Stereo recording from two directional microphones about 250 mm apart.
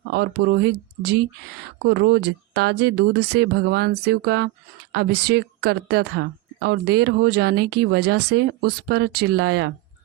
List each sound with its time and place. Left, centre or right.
0.1 s speech: right